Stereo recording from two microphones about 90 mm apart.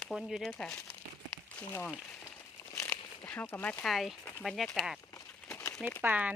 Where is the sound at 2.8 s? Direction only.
20° left (ahead or behind).